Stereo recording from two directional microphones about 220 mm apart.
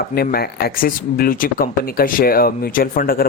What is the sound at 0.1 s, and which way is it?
Speech, 45° left (ahead or behind).